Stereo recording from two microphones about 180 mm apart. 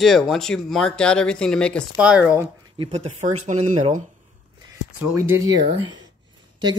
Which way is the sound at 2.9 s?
40° right (ahead or behind).